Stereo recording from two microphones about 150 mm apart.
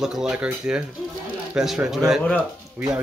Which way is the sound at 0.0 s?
5° right (ahead or behind).